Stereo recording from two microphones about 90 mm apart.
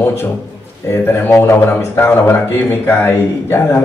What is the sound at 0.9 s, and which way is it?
Speech, 25° left (ahead or behind).